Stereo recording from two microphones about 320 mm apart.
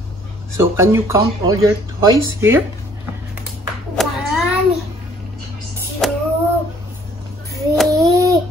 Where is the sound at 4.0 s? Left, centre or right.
Centre.